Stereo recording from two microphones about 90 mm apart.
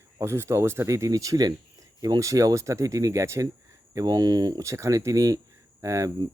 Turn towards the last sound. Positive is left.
turn(degrees=-35)  # may be behind; listen again after turning